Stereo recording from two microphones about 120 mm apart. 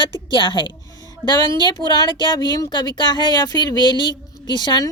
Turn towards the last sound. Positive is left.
turn(degrees=35)  # may be behind; listen again after turning